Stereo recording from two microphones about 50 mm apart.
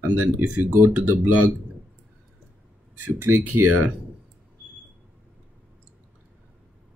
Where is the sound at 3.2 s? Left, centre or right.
Right.